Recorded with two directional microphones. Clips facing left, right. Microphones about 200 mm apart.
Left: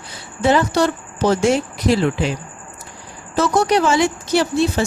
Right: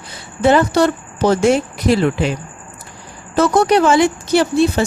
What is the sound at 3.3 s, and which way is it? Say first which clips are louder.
Speech: right 3 dB; 55° right (ahead or behind).